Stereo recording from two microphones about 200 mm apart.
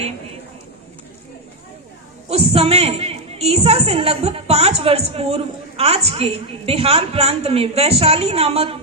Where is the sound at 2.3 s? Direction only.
30° right (ahead or behind).